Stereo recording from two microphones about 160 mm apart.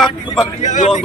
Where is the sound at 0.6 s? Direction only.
50° left (ahead or behind).